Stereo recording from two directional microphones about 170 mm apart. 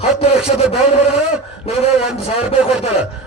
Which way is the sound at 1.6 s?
35° left (ahead or behind).